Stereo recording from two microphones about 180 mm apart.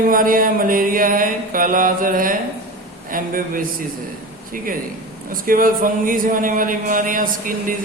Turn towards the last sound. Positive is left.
turn(degrees=-50)  # may be behind; listen again after turning